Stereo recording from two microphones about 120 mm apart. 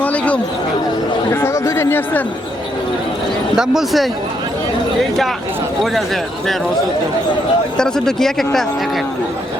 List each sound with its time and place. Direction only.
0.0 s chatter: 10° left (ahead or behind)
1.3 s speech: 20° left (ahead or behind)
3.5 s speech: 5° right (ahead or behind)
7.8 s speech: 5° left (ahead or behind)